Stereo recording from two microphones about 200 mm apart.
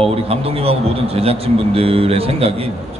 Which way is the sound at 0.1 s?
30° right (ahead or behind).